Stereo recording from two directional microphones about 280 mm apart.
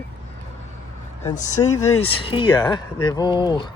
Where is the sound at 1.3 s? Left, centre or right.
Left.